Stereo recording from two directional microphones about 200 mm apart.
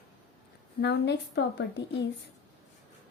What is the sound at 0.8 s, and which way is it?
Speech, 60° left (ahead or behind).